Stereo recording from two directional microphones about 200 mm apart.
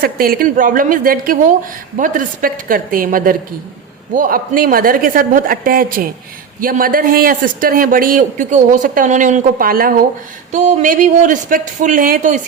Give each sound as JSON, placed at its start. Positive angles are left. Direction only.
{"t": 0.0, "sound": "speech", "side_deg": -50}